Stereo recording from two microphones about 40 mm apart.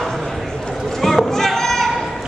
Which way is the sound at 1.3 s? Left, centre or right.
Centre.